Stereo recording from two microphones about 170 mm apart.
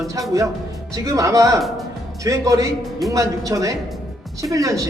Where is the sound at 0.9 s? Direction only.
20° right (ahead or behind).